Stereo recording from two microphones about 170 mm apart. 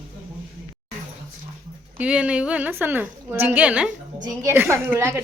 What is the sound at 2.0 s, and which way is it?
A woman's voice, 5° right (ahead or behind).